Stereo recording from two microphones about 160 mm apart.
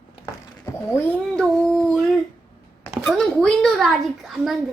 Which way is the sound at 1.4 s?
5° left (ahead or behind).